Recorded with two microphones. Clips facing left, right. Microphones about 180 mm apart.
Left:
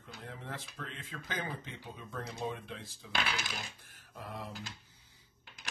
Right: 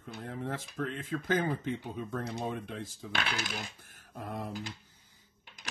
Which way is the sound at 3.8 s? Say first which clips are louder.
Right 5 dB; 50° right (ahead or behind).